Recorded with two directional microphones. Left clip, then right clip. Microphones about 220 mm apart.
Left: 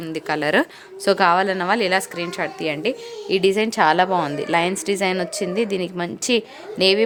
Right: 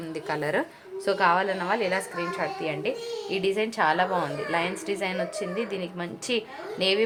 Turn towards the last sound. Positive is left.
turn(degrees=55)  # may be behind; listen again after turning